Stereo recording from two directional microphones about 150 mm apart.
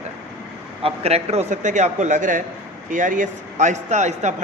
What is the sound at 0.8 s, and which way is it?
A man's voice, 45° right (ahead or behind).